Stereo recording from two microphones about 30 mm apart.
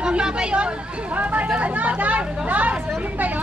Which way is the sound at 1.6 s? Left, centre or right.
Right.